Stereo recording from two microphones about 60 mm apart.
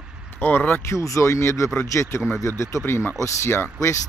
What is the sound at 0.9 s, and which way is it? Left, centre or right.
Speech, left.